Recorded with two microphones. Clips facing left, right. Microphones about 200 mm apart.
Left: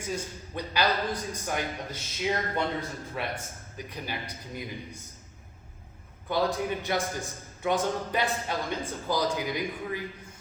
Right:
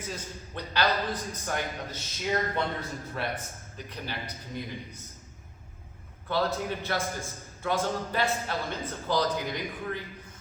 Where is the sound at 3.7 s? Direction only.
10° left (ahead or behind).